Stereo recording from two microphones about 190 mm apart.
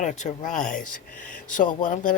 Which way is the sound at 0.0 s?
40° left (ahead or behind).